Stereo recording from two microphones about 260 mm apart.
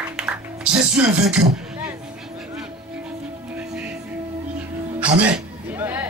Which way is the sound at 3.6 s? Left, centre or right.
Centre.